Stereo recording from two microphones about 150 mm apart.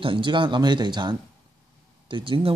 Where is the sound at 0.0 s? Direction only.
35° right (ahead or behind).